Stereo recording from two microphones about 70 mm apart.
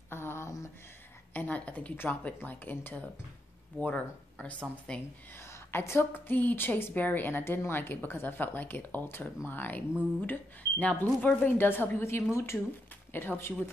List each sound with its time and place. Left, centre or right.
0.1 s a sound: left
1.3 s a woman's voice: left
5.7 s a woman's voice: left
13.1 s a woman's voice: left